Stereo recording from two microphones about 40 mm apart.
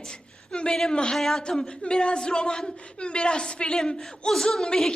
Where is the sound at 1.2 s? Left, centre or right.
Centre.